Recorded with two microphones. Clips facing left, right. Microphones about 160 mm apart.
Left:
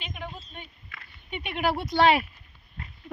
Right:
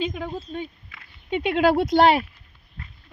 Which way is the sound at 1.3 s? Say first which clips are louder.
Right 9 dB; 90° right.